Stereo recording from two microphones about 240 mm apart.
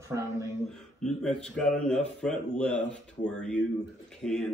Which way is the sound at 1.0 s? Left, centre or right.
Centre.